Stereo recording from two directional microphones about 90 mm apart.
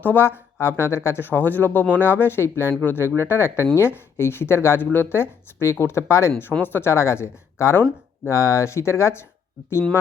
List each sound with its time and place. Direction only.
0.0 s speech: 25° left (ahead or behind)